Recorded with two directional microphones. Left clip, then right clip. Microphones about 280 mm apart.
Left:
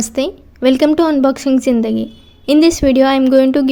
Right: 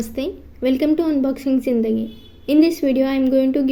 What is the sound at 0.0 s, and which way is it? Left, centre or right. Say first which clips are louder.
A woman's voice: left 7 dB; left.